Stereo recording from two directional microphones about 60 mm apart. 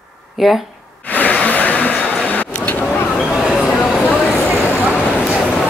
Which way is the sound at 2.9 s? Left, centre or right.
Centre.